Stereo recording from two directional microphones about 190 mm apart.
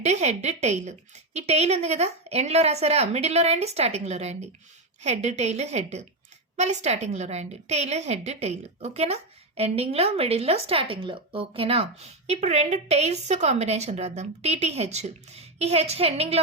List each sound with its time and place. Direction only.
0.0 s a woman's voice: 35° right (ahead or behind)